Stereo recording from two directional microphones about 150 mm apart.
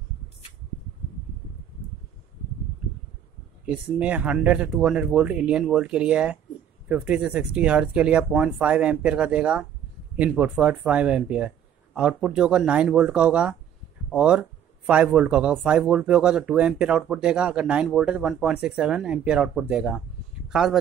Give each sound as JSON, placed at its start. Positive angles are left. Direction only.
{"t": 3.6, "sound": "speech", "side_deg": -10}